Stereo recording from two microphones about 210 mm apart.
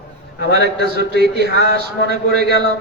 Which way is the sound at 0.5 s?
50° right (ahead or behind).